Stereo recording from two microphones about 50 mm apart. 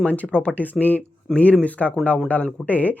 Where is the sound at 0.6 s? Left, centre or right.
Left.